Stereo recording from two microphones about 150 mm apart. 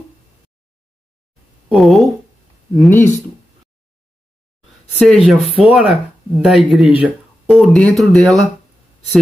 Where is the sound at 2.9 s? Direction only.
15° left (ahead or behind).